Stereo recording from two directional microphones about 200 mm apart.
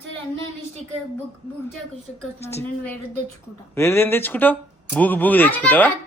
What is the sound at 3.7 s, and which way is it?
A man's voice, 10° left (ahead or behind).